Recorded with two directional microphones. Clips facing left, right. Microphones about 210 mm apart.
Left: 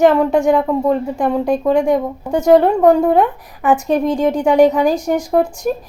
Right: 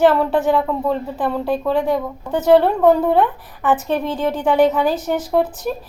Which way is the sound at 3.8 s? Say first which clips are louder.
Left 5 dB; 40° left (ahead or behind).